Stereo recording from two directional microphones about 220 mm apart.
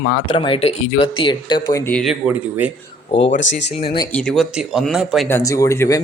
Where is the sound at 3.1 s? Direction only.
30° left (ahead or behind).